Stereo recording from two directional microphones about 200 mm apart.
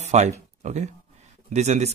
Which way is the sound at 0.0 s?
35° right (ahead or behind).